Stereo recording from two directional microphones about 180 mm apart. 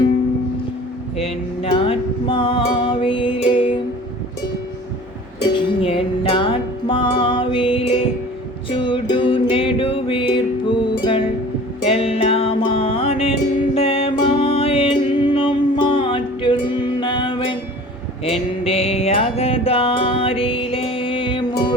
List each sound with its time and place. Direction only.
1.1 s music: 35° left (ahead or behind)
5.4 s music: 25° left (ahead or behind)